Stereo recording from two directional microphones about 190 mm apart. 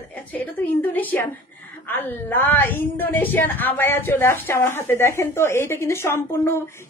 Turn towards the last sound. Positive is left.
turn(degrees=15)  # may be behind; listen again after turning